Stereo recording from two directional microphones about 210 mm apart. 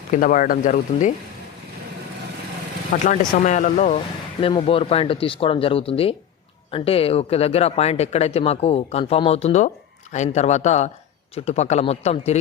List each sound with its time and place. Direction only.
0.1 s speech: 40° left (ahead or behind)
3.0 s speech: 35° left (ahead or behind)